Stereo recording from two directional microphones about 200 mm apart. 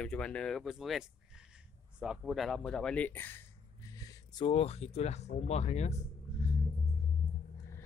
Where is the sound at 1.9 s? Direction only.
5° right (ahead or behind); by 6.0 s 35° left (ahead or behind).